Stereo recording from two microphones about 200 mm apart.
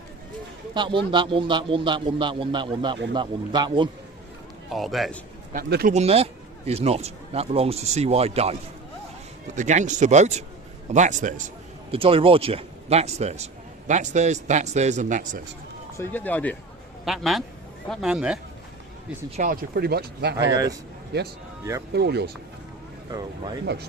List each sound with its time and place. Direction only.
0.7 s a man's voice: 25° right (ahead or behind)
4.7 s speech: centre (ahead or behind)
5.5 s speech: 50° right (ahead or behind)
5.9 s speech: 30° right (ahead or behind)
9.6 s a man's voice: 40° right (ahead or behind)
11.9 s speech: 30° right (ahead or behind)
16.0 s speech: 10° left (ahead or behind)
19.4 s speech: 50° right (ahead or behind)
20.4 s speech: 20° right (ahead or behind)
21.9 s speech: 55° right (ahead or behind)
23.6 s speech: 55° right (ahead or behind)